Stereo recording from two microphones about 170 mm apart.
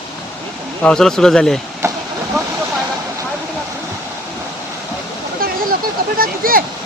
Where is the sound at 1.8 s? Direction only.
15° right (ahead or behind).